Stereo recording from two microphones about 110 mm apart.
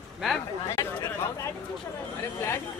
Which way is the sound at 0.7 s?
25° left (ahead or behind).